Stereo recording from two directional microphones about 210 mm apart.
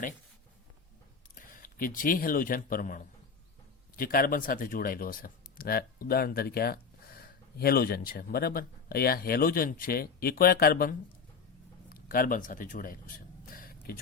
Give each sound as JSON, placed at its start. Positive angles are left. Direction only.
{"t": 1.4, "sound": "speech", "side_deg": 40}